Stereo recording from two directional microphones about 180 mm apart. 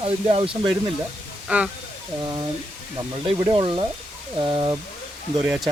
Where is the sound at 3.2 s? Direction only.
30° right (ahead or behind).